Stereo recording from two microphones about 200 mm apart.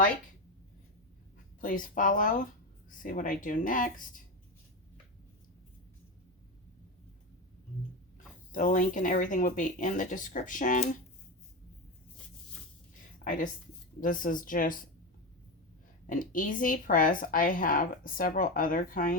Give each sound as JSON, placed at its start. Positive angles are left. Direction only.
{"t": 1.6, "sound": "speech", "side_deg": 45}
{"t": 8.5, "sound": "speech", "side_deg": 40}
{"t": 13.2, "sound": "a woman's voice", "side_deg": 40}
{"t": 16.0, "sound": "a woman's voice", "side_deg": 45}